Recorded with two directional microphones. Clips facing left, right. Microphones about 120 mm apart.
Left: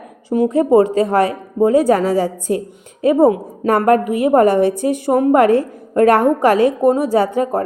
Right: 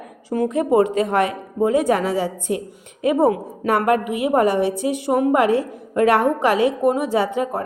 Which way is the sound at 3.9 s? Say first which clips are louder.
Left 5 dB; 40° left (ahead or behind).